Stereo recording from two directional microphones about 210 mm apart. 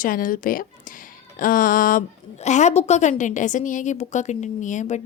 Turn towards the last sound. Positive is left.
turn(degrees=35)  # may be behind; listen again after turning